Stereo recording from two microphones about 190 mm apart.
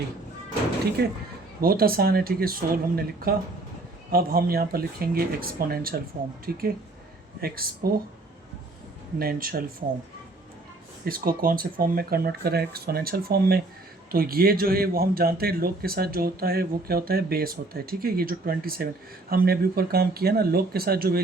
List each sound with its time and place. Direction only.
1.0 s a man's voice: 60° right (ahead or behind)
7.4 s a man's voice: 50° right (ahead or behind)
9.1 s a man's voice: 50° right (ahead or behind)
11.0 s a man's voice: 50° right (ahead or behind)